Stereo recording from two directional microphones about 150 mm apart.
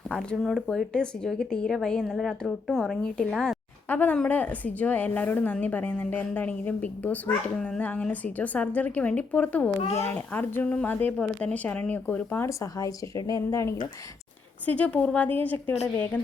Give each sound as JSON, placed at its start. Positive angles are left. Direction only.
{"t": 0.1, "sound": "a woman's voice", "side_deg": 5}
{"t": 9.8, "sound": "a child's voice", "side_deg": 45}
{"t": 10.3, "sound": "a woman's voice", "side_deg": 10}
{"t": 12.5, "sound": "speech", "side_deg": 25}
{"t": 14.7, "sound": "a woman's voice", "side_deg": 10}